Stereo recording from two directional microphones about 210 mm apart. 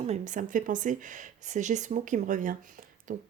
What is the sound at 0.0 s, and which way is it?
Speech, 35° right (ahead or behind).